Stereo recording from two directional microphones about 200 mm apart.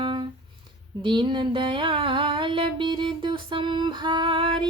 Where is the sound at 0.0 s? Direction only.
25° right (ahead or behind).